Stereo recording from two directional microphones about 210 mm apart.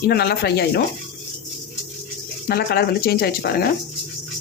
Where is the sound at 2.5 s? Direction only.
50° left (ahead or behind).